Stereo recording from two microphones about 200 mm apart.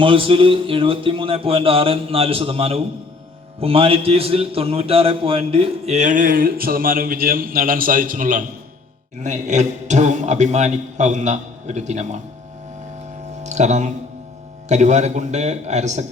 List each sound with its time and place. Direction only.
0.0 s music: 25° right (ahead or behind)
3.6 s a man's voice: 30° right (ahead or behind)
13.4 s a man's voice: 35° right (ahead or behind)